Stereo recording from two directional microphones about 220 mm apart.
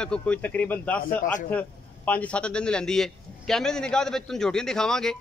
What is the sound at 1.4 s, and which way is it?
A man's voice, 5° left (ahead or behind).